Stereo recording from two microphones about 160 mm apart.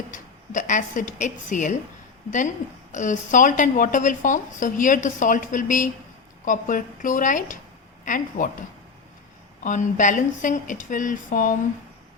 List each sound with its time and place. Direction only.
0.1 s a woman's voice: 55° left (ahead or behind)
2.9 s a woman's voice: 50° left (ahead or behind)
9.6 s a woman's voice: 50° left (ahead or behind)